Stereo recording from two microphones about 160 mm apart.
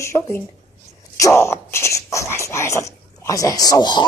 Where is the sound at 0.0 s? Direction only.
15° left (ahead or behind).